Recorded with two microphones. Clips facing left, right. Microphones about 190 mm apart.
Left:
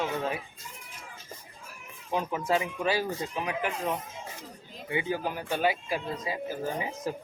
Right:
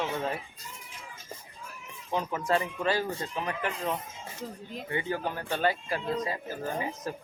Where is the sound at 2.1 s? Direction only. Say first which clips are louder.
Even; 10° left (ahead or behind).